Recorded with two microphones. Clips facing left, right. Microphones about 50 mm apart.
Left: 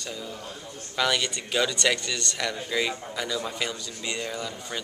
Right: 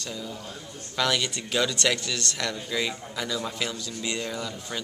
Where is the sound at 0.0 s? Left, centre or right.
Centre.